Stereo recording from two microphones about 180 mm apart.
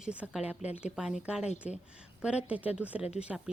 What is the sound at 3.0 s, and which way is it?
Speech, 35° left (ahead or behind).